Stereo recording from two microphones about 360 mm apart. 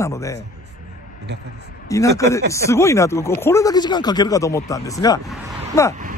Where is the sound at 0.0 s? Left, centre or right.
Centre.